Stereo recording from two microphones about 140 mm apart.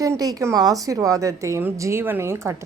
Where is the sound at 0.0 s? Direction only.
25° right (ahead or behind).